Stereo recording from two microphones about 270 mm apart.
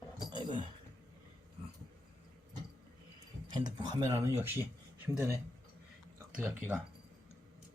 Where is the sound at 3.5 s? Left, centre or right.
Centre.